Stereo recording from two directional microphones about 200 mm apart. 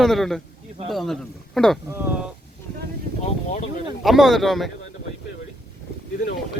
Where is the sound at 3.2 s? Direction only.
35° left (ahead or behind).